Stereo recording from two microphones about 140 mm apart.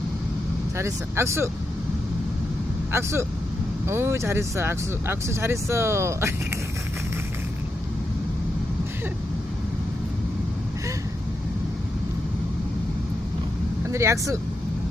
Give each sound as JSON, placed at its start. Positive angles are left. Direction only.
{"t": 0.8, "sound": "speech", "side_deg": -20}
{"t": 2.9, "sound": "speech", "side_deg": -20}
{"t": 13.9, "sound": "speech", "side_deg": -20}